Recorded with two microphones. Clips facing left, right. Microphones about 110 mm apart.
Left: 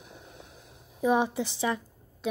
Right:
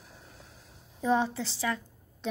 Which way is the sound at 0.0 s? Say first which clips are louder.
Left 4 dB; 20° left (ahead or behind).